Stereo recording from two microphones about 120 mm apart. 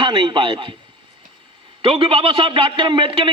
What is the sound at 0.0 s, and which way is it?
Speech, 45° right (ahead or behind).